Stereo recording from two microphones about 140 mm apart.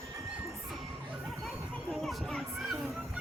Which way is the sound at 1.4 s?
5° left (ahead or behind).